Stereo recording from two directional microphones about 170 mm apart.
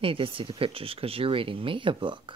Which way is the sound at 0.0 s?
30° right (ahead or behind).